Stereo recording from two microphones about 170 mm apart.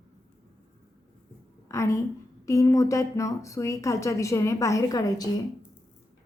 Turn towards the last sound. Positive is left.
turn(degrees=20)  # may be behind; listen again after turning